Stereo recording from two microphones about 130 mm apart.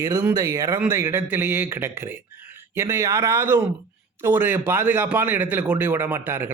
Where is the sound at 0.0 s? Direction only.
20° right (ahead or behind).